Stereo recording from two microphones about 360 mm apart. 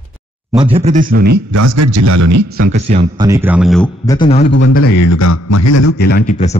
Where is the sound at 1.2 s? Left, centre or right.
Right.